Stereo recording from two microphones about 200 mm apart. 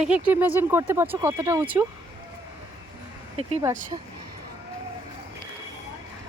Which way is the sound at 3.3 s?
30° right (ahead or behind).